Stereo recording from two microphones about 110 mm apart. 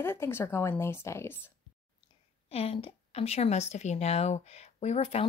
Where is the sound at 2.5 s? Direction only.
65° left (ahead or behind).